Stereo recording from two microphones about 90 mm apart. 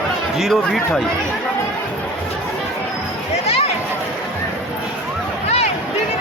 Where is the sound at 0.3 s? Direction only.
Centre (ahead or behind).